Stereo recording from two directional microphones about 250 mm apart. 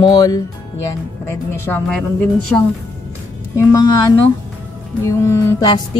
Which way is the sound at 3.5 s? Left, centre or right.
Centre.